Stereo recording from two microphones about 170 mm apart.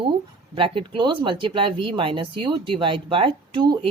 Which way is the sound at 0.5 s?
30° right (ahead or behind).